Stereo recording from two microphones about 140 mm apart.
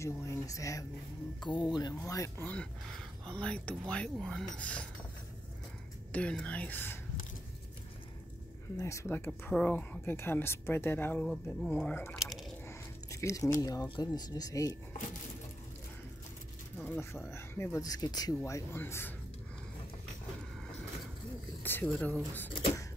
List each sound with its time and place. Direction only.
0.0 s speech: 20° left (ahead or behind)
6.1 s speech: 10° left (ahead or behind)
8.7 s speech: 20° left (ahead or behind)
11.2 s speech: 5° left (ahead or behind)
11.7 s speech: 15° left (ahead or behind)
12.2 s squish: centre (ahead or behind)
12.6 s speech: 20° left (ahead or behind)
16.7 s speech: 10° left (ahead or behind)
21.8 s speech: 5° left (ahead or behind)